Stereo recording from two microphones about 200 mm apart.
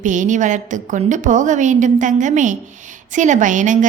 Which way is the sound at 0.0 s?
40° right (ahead or behind).